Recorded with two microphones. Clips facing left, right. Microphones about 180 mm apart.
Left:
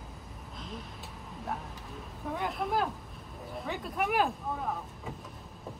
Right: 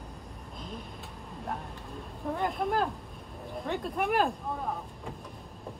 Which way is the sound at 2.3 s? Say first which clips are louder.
Right 3 dB; centre (ahead or behind).